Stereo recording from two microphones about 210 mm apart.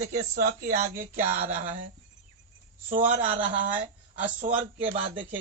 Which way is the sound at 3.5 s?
40° right (ahead or behind).